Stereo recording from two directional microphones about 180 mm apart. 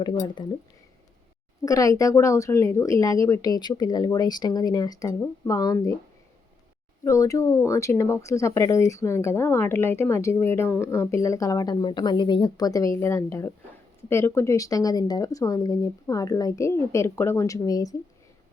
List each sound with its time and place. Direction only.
1.6 s speech: 20° left (ahead or behind)
7.0 s speech: 15° left (ahead or behind)